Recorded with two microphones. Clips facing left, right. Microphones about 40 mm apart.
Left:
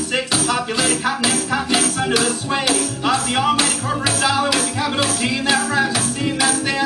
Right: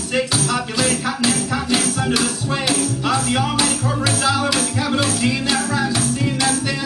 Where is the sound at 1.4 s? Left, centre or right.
Left.